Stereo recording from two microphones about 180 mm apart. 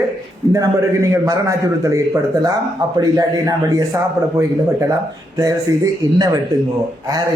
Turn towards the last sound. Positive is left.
turn(degrees=-20)  # may be behind; listen again after turning